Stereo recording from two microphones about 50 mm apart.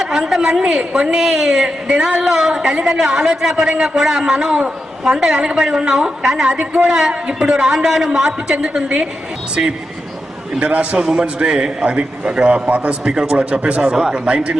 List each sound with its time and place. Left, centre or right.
0.0 s a woman's voice: centre
10.6 s a man's voice: right